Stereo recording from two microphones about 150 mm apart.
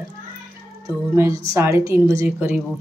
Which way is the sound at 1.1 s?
20° right (ahead or behind).